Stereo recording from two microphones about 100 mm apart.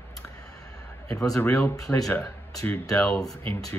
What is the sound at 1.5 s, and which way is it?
Speech, 30° left (ahead or behind).